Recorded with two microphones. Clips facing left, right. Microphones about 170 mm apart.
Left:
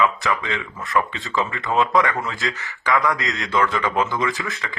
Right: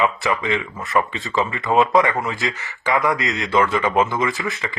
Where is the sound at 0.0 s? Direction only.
20° right (ahead or behind).